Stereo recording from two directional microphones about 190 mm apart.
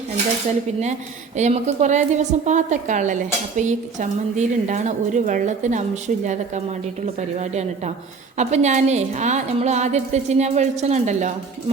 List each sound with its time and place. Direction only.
1.4 s a woman's voice: 40° right (ahead or behind)